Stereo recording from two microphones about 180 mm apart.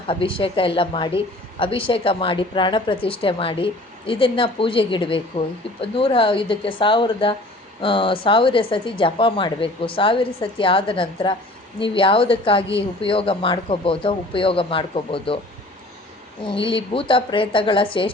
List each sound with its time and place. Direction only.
0.1 s a woman's voice: 30° left (ahead or behind)
16.5 s a woman's voice: 30° left (ahead or behind)